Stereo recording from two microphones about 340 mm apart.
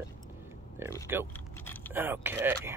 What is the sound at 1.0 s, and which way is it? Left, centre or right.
Speech, centre.